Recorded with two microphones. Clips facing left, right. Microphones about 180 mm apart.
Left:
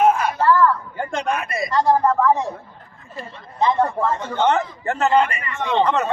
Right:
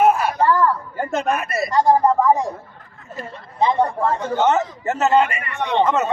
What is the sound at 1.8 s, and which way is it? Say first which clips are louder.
Speech: right 2 dB; 15° right (ahead or behind).